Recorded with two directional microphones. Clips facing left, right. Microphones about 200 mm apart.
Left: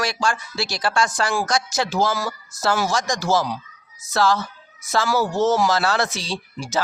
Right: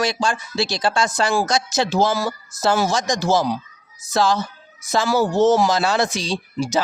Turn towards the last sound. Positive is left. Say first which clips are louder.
# right 4 dB
turn(degrees=-15)  # may be behind; listen again after turning